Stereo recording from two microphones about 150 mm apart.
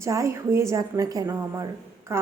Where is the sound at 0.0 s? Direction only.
20° right (ahead or behind).